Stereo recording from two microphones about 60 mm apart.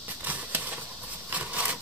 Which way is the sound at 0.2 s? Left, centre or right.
Right.